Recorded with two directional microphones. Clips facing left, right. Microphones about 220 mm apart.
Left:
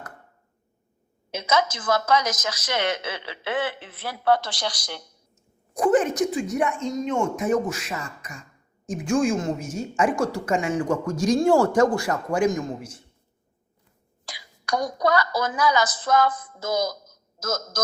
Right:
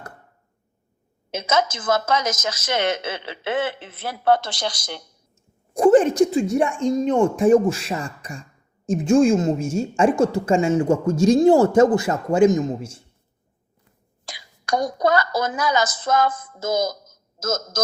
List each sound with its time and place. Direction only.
1.3 s a woman's voice: 25° right (ahead or behind)
14.3 s a woman's voice: 25° right (ahead or behind)